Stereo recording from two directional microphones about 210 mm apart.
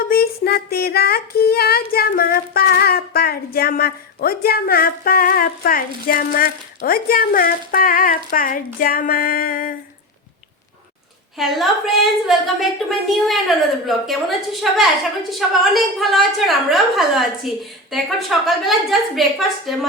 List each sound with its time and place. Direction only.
0.1 s child singing: 45° left (ahead or behind)
11.3 s a woman's voice: centre (ahead or behind)